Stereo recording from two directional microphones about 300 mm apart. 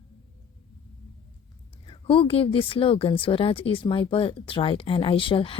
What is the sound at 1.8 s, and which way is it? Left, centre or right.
Speech, centre.